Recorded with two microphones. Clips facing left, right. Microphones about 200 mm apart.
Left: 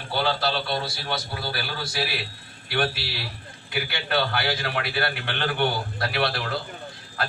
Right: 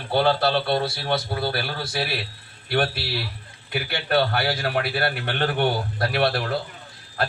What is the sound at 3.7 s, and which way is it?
A man's voice, 45° right (ahead or behind).